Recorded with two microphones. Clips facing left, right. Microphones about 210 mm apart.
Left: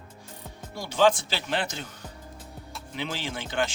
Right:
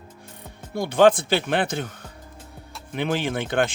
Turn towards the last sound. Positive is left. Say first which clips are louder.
# right 6 dB
turn(degrees=-55)  # may be behind; listen again after turning